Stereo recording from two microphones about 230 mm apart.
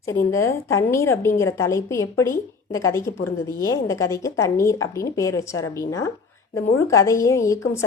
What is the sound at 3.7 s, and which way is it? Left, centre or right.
A woman's voice, centre.